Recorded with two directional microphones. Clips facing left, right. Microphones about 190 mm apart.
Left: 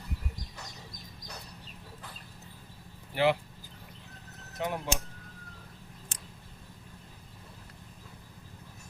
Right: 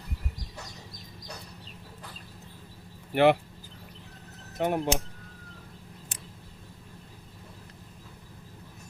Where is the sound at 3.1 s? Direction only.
60° right (ahead or behind).